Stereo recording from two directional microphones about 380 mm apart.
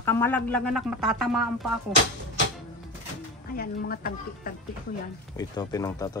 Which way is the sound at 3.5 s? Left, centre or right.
Left.